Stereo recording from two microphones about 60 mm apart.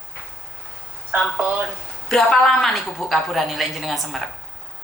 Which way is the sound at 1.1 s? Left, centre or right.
Right.